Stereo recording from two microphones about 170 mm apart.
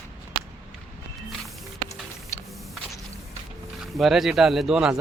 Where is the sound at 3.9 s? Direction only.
Centre (ahead or behind).